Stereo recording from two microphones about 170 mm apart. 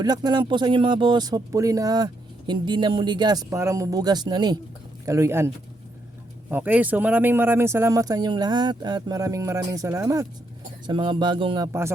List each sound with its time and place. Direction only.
0.0 s speech: 25° right (ahead or behind)
6.5 s speech: 10° right (ahead or behind); by 11.7 s 30° right (ahead or behind)